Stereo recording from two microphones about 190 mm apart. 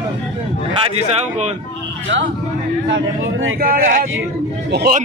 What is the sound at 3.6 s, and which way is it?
Speech, 50° right (ahead or behind).